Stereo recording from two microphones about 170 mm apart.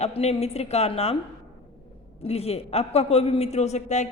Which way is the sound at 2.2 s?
35° left (ahead or behind).